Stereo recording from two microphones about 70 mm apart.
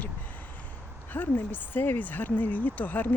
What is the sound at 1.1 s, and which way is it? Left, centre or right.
Speech, left.